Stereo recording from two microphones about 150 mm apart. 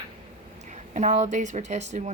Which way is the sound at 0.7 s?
55° right (ahead or behind).